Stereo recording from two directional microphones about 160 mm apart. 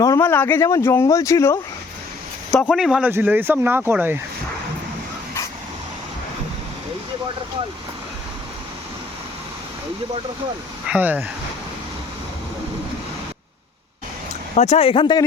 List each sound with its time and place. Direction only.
0.0 s speech: 20° left (ahead or behind)
2.5 s speech: 5° left (ahead or behind)
3.1 s speech: 10° right (ahead or behind)
10.8 s speech: 10° right (ahead or behind)
14.5 s speech: 45° left (ahead or behind)